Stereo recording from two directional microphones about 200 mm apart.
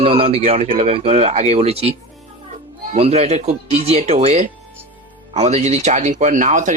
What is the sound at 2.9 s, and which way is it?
Speech, 30° right (ahead or behind).